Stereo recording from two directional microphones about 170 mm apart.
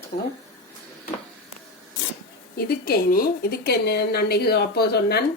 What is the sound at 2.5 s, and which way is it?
A woman's voice, 65° left (ahead or behind).